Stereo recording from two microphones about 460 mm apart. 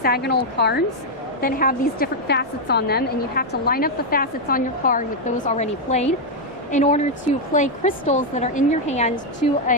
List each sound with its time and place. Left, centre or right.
0.0 s a woman's voice: left